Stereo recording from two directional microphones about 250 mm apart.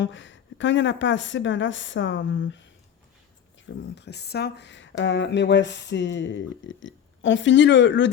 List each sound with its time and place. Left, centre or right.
0.0 s speech: left
3.9 s speech: left